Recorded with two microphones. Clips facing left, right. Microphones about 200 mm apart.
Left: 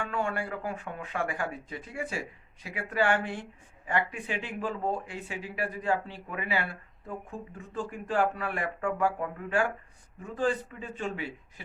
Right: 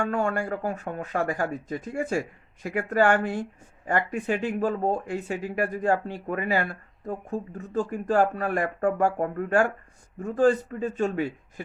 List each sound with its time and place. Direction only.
0.0 s speech: 45° right (ahead or behind)